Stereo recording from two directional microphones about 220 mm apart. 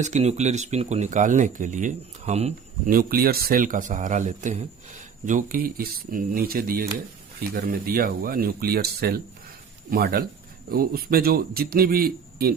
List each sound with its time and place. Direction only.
0.0 s speech: 30° right (ahead or behind)